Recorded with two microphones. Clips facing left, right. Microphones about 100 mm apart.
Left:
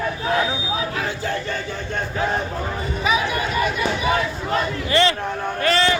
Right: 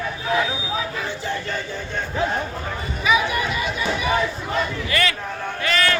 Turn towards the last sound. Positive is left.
turn(degrees=40)  # may be behind; listen again after turning